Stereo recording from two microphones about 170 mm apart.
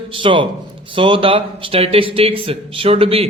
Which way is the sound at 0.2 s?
30° right (ahead or behind).